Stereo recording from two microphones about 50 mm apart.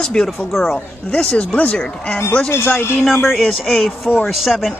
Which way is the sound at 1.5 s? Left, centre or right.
Left.